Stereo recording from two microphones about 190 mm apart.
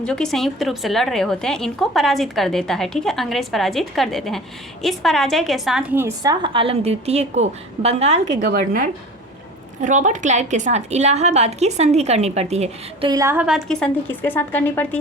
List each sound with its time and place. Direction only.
0.0 s a woman's voice: 5° left (ahead or behind); by 8.3 s 35° right (ahead or behind)
8.3 s a woman's voice: 50° right (ahead or behind); by 13.1 s 35° right (ahead or behind)
13.1 s a woman's voice: 15° right (ahead or behind); by 14.8 s 10° left (ahead or behind)